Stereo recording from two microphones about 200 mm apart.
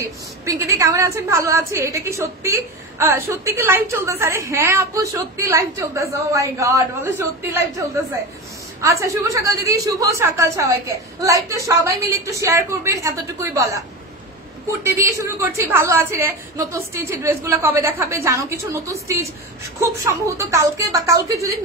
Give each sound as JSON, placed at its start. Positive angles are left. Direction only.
{"t": 0.0, "sound": "a woman's voice", "side_deg": -15}
{"t": 9.0, "sound": "a woman's voice", "side_deg": -15}